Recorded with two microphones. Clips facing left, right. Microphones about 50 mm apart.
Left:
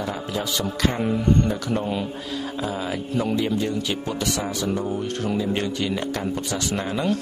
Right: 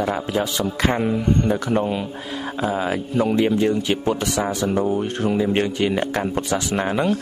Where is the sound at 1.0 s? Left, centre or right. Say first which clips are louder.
Right 1 dB; centre.